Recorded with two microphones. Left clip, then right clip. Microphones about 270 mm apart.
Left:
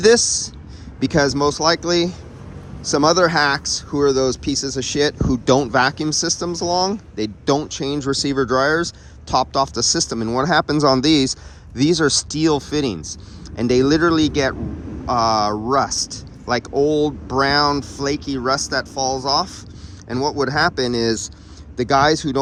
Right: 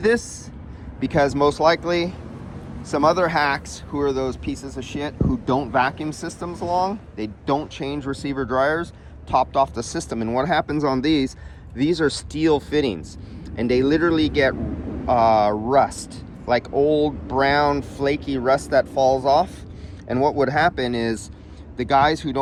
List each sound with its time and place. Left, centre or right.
0.9 s speech: centre